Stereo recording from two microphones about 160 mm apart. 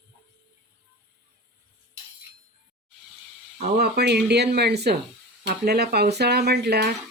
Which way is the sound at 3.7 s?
90° right.